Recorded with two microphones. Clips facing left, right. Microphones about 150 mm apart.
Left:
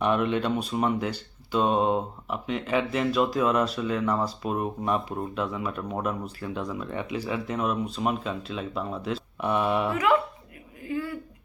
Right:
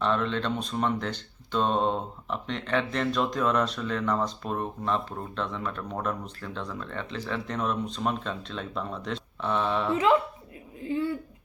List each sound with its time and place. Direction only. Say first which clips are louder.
0.0 s speech: left 3 dB; 15° left (ahead or behind)
9.9 s speech: right 3 dB; 25° right (ahead or behind)
10.8 s a sound: right 2 dB; 25° right (ahead or behind)